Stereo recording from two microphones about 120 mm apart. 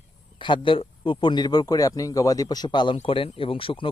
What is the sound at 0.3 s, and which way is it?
A man's voice, 45° left (ahead or behind).